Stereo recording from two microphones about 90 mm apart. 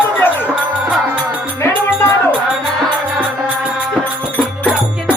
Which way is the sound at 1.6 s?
25° left (ahead or behind).